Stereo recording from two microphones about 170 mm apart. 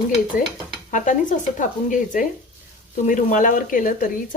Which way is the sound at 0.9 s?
50° left (ahead or behind).